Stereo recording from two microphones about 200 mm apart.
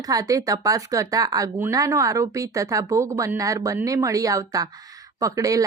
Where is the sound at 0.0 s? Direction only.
15° right (ahead or behind).